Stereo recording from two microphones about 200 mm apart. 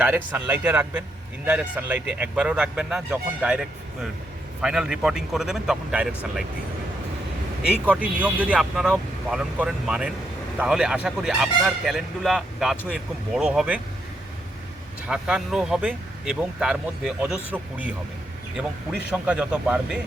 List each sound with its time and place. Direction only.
0.0 s speech: 10° right (ahead or behind)
4.6 s speech: 5° right (ahead or behind)
7.6 s speech: 5° right (ahead or behind)
15.0 s speech: 5° right (ahead or behind)